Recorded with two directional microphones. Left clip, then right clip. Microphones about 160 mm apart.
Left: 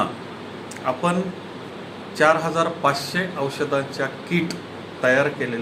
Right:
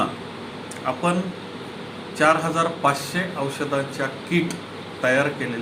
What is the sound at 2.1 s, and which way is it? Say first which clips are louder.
A man's voice: left 1 dB; 5° left (ahead or behind).